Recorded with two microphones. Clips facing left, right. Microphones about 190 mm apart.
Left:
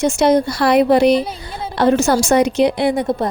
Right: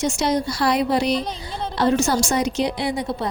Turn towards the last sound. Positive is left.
turn(degrees=45)  # may be behind; listen again after turning